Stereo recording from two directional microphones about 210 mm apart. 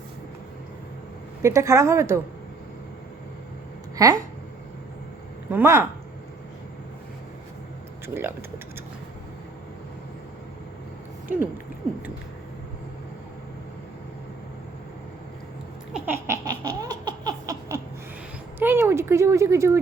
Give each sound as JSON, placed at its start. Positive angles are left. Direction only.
{"t": 1.4, "sound": "a woman's voice", "side_deg": -15}
{"t": 3.9, "sound": "speech", "side_deg": -15}
{"t": 5.5, "sound": "a woman's voice", "side_deg": -10}
{"t": 8.0, "sound": "a woman's voice", "side_deg": -10}
{"t": 15.9, "sound": "laughter", "side_deg": -5}
{"t": 18.6, "sound": "speech", "side_deg": -10}